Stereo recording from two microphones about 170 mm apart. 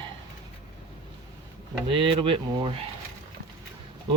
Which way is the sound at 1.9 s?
30° right (ahead or behind).